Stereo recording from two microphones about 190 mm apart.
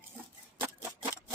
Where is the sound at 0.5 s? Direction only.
10° right (ahead or behind).